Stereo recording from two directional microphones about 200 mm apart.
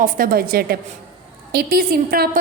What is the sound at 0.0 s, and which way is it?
A woman's voice, 45° right (ahead or behind).